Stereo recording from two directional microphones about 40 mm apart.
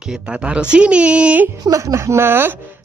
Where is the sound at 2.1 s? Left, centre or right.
Right.